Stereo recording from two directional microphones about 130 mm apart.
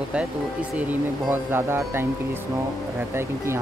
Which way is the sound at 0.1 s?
10° right (ahead or behind).